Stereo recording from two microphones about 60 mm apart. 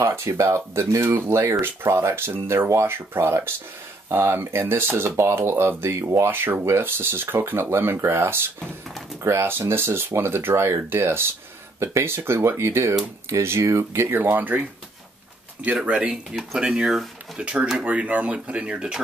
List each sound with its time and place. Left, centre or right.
0.0 s speech: right
14.0 s speech: right
15.6 s speech: centre
17.4 s speech: right